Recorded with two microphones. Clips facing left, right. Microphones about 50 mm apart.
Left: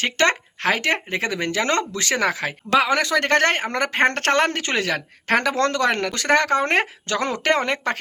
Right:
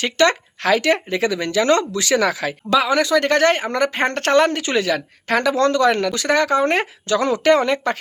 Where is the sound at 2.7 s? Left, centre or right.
Left.